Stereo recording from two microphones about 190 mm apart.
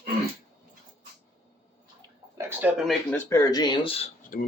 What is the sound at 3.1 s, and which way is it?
Speech, 15° left (ahead or behind).